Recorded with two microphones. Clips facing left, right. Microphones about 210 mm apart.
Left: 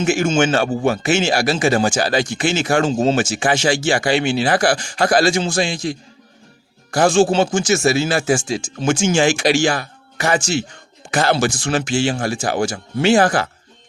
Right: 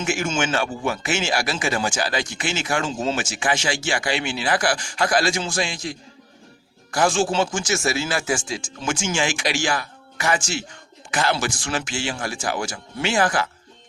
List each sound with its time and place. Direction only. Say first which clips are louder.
0.0 s speech: left 7 dB; 40° left (ahead or behind)
2.9 s a man's voice: left 8 dB; 30° left (ahead or behind)